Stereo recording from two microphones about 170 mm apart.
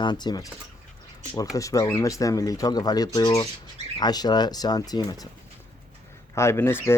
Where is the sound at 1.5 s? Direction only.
20° left (ahead or behind).